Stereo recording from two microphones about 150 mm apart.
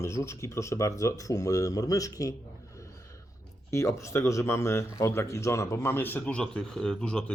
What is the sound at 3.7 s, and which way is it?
Speech, 20° left (ahead or behind).